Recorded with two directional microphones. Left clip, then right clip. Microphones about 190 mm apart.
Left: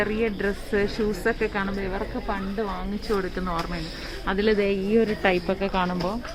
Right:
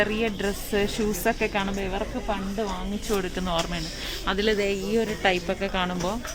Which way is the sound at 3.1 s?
30° right (ahead or behind).